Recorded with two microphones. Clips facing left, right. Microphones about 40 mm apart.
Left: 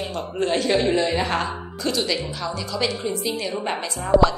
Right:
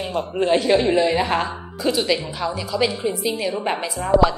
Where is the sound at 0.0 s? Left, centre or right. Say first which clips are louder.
Right 3 dB; centre.